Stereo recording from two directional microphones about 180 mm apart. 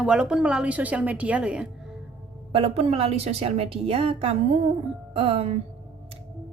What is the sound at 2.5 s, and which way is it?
A woman's voice, 35° right (ahead or behind).